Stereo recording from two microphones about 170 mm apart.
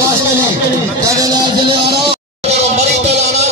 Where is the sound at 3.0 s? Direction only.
40° right (ahead or behind).